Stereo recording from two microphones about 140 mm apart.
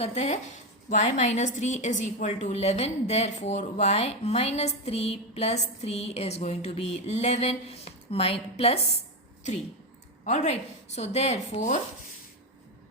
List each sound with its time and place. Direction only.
0.0 s a woman's voice: 50° left (ahead or behind)
10.2 s a woman's voice: 55° left (ahead or behind)